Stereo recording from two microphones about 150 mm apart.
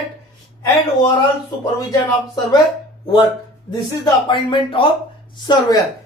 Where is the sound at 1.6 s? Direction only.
25° left (ahead or behind).